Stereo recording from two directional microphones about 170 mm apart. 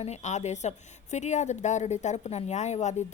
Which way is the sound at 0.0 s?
40° left (ahead or behind).